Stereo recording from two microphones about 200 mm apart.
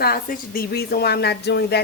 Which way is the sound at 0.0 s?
45° left (ahead or behind).